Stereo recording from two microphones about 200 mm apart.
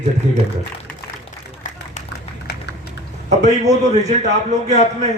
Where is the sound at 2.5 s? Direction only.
55° left (ahead or behind).